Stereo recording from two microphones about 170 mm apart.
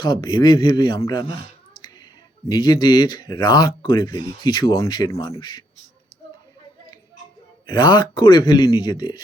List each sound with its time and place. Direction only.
0.0 s speech: 25° left (ahead or behind)
2.5 s speech: 25° left (ahead or behind)
7.7 s speech: 25° left (ahead or behind)